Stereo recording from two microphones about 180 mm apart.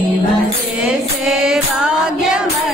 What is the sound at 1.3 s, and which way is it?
Music, 5° right (ahead or behind).